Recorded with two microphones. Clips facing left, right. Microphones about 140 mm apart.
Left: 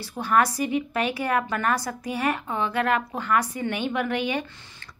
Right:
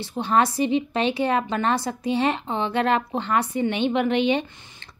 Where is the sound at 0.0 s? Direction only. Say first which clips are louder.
Right 1 dB; 25° right (ahead or behind).